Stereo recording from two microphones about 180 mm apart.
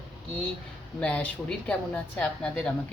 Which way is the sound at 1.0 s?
5° left (ahead or behind).